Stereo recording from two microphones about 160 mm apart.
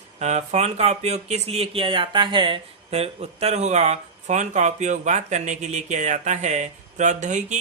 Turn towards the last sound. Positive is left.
turn(degrees=-50)  # may be behind; listen again after turning